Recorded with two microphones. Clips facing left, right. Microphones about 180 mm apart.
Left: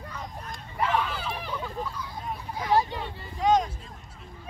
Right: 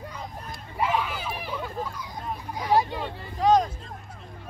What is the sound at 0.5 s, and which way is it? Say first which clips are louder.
Hubbub: right 1 dB; 10° right (ahead or behind).